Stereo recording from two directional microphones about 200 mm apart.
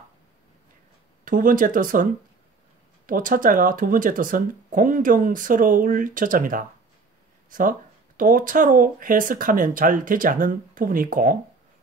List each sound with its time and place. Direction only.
1.2 s speech: 40° right (ahead or behind)
3.1 s speech: 40° right (ahead or behind)